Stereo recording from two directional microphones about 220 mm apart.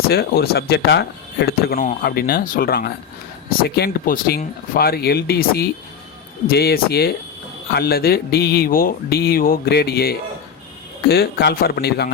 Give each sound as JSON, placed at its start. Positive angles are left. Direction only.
{"t": 0.1, "sound": "speech", "side_deg": 45}